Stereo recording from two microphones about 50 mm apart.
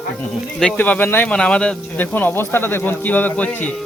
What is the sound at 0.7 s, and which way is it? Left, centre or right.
Speech, left.